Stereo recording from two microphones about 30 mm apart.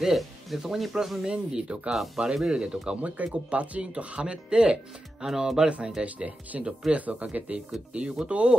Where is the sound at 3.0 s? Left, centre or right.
Right.